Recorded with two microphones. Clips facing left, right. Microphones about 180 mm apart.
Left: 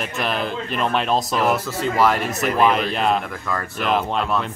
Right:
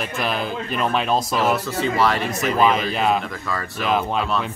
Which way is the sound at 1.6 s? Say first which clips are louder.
Right 2 dB; 70° right (ahead or behind).